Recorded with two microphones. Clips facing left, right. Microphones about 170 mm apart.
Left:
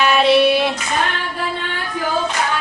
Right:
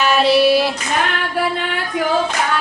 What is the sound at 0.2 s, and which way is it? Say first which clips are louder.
Child singing: right 1 dB; centre (ahead or behind).